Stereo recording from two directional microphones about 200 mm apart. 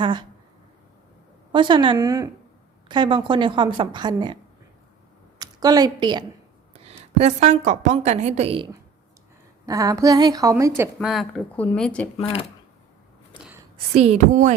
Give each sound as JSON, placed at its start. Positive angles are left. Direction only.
{"t": 0.0, "sound": "a woman's voice", "side_deg": -25}
{"t": 1.5, "sound": "a woman's voice", "side_deg": -25}
{"t": 5.4, "sound": "a woman's voice", "side_deg": -20}
{"t": 9.6, "sound": "a woman's voice", "side_deg": -15}
{"t": 11.0, "sound": "speech", "side_deg": 0}
{"t": 12.1, "sound": "speech", "side_deg": 30}
{"t": 13.9, "sound": "a woman's voice", "side_deg": -30}